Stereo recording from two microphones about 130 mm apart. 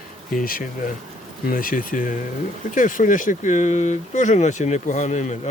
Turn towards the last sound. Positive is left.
turn(degrees=65)  # may be behind; listen again after turning